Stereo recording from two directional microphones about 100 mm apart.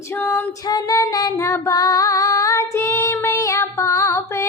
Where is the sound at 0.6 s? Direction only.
40° left (ahead or behind).